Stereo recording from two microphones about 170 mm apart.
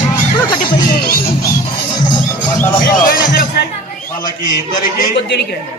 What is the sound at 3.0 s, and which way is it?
Music, 55° left (ahead or behind).